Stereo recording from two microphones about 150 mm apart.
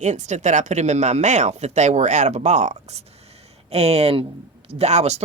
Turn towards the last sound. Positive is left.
turn(degrees=-45)  # may be behind; listen again after turning